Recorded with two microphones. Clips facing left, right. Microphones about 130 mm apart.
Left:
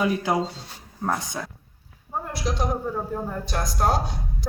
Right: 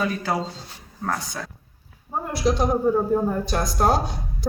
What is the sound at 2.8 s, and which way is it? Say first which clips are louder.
Speech: right 9 dB; 25° right (ahead or behind).